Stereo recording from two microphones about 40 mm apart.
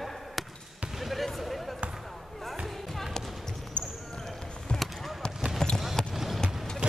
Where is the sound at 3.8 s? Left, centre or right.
Left.